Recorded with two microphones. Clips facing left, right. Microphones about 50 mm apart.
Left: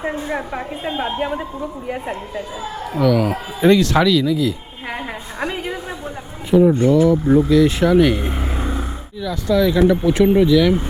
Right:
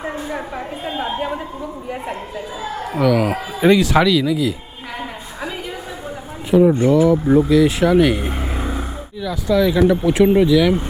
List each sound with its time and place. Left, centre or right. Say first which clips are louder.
0.3 s a woman's voice: left 1 dB; centre
2.8 s speech: even; centre
6.6 s speech: even; centre